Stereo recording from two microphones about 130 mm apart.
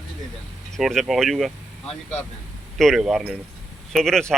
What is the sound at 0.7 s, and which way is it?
Speech, centre (ahead or behind).